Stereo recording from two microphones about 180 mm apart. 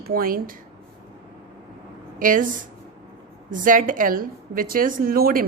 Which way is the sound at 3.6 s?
50° right (ahead or behind).